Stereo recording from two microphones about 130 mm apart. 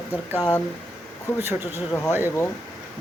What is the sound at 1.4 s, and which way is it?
Speech, 20° right (ahead or behind).